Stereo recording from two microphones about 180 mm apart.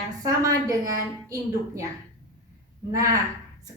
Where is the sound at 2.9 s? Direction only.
15° right (ahead or behind).